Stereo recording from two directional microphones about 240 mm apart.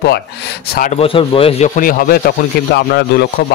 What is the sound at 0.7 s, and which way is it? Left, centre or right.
Speech, left.